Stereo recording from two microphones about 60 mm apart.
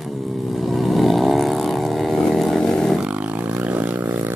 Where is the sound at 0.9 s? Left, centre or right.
Centre.